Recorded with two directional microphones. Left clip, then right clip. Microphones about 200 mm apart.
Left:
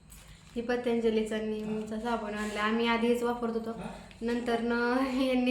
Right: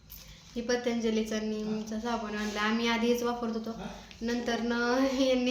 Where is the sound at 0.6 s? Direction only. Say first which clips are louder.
Left 1 dB; centre (ahead or behind).